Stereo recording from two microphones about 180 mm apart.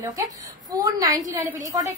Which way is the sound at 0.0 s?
20° right (ahead or behind).